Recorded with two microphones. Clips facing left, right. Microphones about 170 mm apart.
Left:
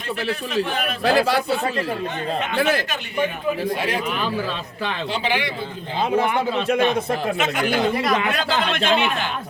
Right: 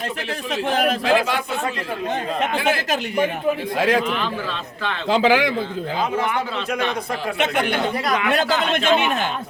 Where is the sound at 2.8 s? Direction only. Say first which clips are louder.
Right 3 dB; 90° right.